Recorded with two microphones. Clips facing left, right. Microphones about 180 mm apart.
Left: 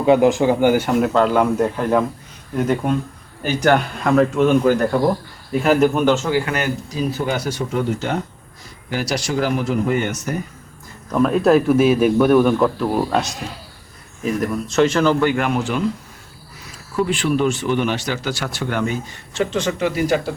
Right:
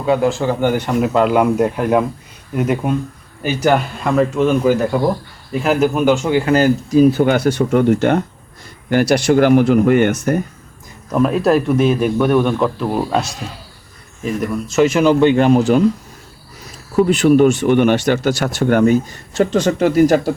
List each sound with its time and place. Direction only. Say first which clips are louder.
0.0 s speech: left 2 dB; 20° left (ahead or behind); by 1.1 s 5° left (ahead or behind)
1.1 s a man's voice: right 5 dB; 10° right (ahead or behind)
6.2 s speech: right 6 dB; 25° right (ahead or behind)
6.9 s speech: right 12 dB; 55° right (ahead or behind)
11.1 s a man's voice: even; 5° right (ahead or behind); by 15.8 s 40° right (ahead or behind)
16.9 s speech: right 8 dB; 40° right (ahead or behind)